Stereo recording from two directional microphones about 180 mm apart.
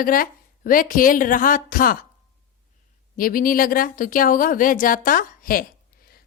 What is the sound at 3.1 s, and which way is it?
A woman's voice, 50° left (ahead or behind).